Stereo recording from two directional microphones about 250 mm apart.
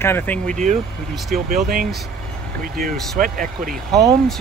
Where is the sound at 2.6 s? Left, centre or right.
Right.